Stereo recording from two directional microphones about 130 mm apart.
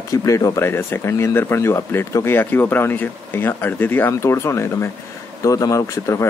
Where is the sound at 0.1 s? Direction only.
25° left (ahead or behind).